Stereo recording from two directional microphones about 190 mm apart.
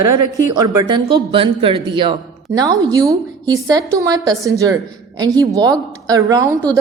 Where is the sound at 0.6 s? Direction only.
25° right (ahead or behind).